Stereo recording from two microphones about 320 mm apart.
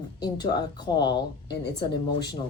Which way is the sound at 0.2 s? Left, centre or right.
Centre.